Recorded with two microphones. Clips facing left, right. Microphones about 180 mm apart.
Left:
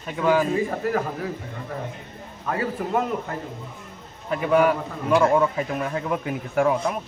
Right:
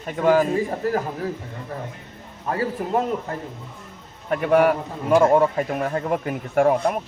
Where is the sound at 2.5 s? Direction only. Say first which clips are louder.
Right 2 dB; 35° right (ahead or behind).